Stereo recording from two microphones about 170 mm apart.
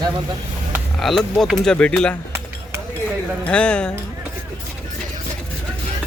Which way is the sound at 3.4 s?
5° left (ahead or behind).